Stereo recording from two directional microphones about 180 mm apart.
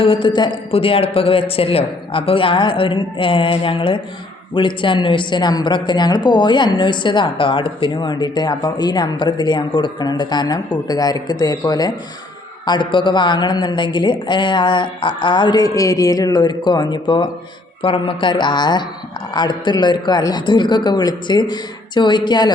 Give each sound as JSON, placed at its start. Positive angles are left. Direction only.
{"t": 0.0, "sound": "a woman's voice", "side_deg": 30}